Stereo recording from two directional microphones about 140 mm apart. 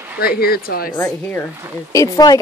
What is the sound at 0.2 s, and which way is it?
Speech, 90° left.